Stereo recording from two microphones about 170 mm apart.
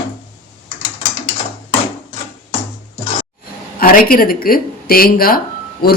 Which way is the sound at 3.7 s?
60° left (ahead or behind).